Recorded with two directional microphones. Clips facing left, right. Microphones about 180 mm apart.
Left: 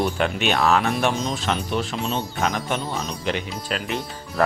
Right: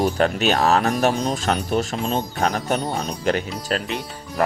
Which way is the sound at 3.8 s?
15° right (ahead or behind).